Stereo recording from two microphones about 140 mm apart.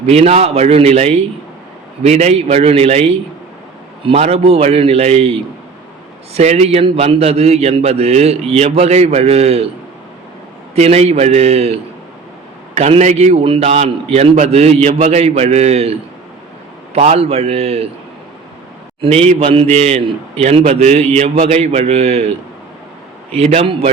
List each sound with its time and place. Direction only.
0.0 s a man's voice: 50° right (ahead or behind)
10.8 s a man's voice: 50° right (ahead or behind)
19.0 s a man's voice: 45° right (ahead or behind)
23.3 s a man's voice: 50° right (ahead or behind)